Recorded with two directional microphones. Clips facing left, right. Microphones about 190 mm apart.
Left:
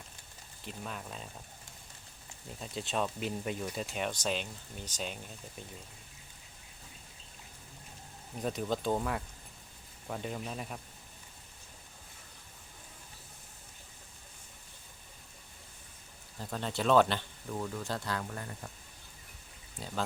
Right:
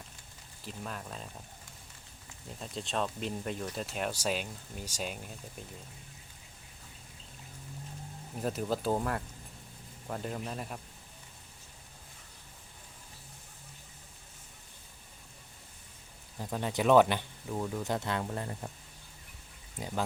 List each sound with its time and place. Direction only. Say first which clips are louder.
0.6 s speech: right 1 dB; centre (ahead or behind)
2.6 s speech: even; centre (ahead or behind)
8.4 s speech: right 1 dB; 5° right (ahead or behind)
16.4 s speech: right 3 dB; 10° right (ahead or behind)